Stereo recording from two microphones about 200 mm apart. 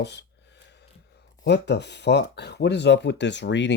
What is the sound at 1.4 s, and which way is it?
Speech, 60° left (ahead or behind).